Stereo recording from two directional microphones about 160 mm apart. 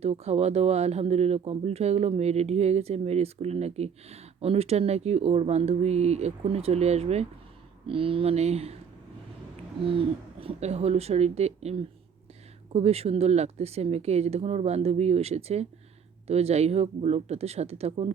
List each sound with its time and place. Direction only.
0.0 s speech: 40° right (ahead or behind)
9.8 s speech: 35° right (ahead or behind)